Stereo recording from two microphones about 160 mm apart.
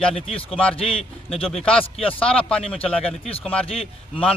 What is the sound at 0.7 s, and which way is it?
Speech, 35° left (ahead or behind).